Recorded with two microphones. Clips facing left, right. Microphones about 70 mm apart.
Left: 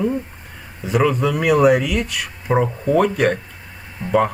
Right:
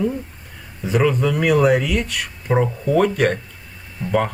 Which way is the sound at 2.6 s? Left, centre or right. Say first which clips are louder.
Left 1 dB; centre.